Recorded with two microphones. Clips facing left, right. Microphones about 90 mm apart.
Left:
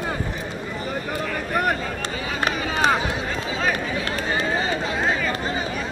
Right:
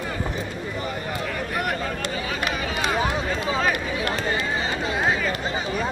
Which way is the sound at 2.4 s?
35° left (ahead or behind).